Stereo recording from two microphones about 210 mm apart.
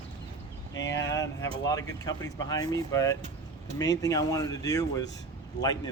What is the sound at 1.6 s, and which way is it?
A man's voice, 15° left (ahead or behind).